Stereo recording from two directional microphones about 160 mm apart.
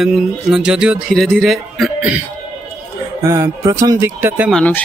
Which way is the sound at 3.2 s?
20° right (ahead or behind).